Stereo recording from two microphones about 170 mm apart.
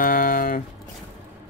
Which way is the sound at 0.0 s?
55° left (ahead or behind).